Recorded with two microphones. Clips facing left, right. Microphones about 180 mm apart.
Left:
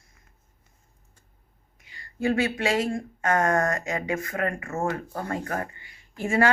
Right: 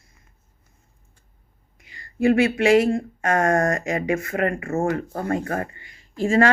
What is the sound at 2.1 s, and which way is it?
Speech, 90° right.